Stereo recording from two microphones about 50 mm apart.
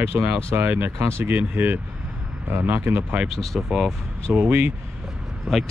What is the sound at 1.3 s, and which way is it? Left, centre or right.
Speech, right.